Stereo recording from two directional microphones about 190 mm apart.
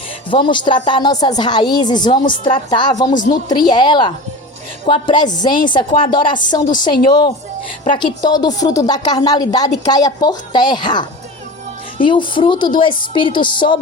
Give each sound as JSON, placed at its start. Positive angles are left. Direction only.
{"t": 0.3, "sound": "a woman's voice", "side_deg": 25}